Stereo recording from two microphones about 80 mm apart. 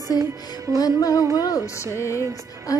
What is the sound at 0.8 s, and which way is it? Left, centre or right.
Music, left.